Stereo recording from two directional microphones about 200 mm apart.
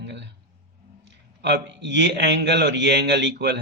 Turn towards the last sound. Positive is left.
turn(degrees=-55)  # may be behind; listen again after turning